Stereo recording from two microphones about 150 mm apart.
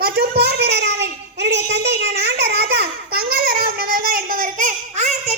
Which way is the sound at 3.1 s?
80° right.